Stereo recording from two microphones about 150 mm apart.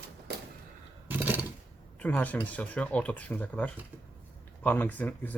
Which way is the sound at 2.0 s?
10° left (ahead or behind).